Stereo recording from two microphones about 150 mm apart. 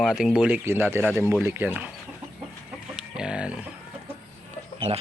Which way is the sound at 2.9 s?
5° right (ahead or behind).